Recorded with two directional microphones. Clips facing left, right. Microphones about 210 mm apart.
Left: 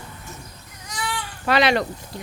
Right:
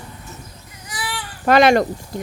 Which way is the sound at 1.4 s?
45° right (ahead or behind).